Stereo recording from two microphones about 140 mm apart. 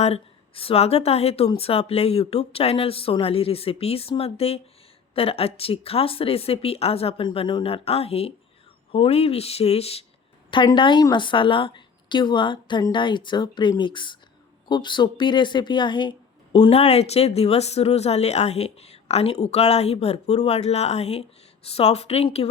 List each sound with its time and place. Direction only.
0.0 s speech: 45° left (ahead or behind)
10.8 s a woman's voice: 35° left (ahead or behind)